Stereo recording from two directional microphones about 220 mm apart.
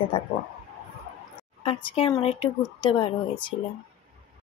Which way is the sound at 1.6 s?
25° left (ahead or behind).